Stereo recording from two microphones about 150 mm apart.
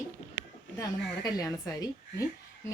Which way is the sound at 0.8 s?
25° left (ahead or behind).